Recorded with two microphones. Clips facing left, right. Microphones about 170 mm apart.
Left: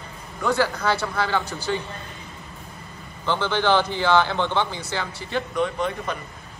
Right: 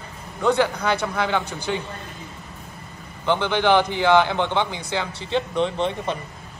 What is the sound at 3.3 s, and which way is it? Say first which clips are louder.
Speech: right 2 dB; 15° right (ahead or behind).